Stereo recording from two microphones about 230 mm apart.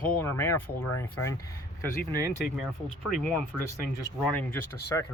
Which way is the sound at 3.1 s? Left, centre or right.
Centre.